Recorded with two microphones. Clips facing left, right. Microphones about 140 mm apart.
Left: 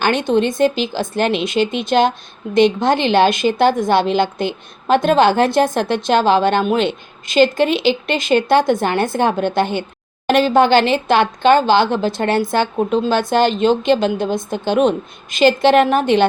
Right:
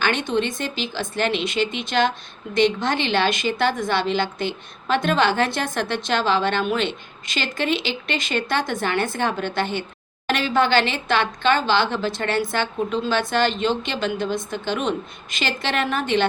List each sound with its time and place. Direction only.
0.0 s speech: 45° left (ahead or behind)
7.7 s speech: 5° left (ahead or behind)
8.0 s speech: 45° left (ahead or behind)